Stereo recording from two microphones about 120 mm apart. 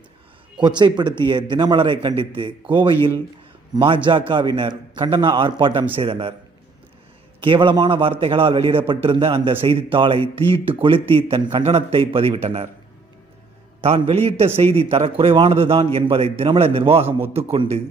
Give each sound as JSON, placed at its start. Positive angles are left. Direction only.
{"t": 0.6, "sound": "a man's voice", "side_deg": -40}
{"t": 5.9, "sound": "a man's voice", "side_deg": -55}
{"t": 7.4, "sound": "a man's voice", "side_deg": -45}
{"t": 13.8, "sound": "a man's voice", "side_deg": -55}